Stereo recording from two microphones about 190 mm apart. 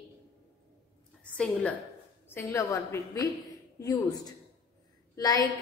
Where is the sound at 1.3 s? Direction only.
5° left (ahead or behind).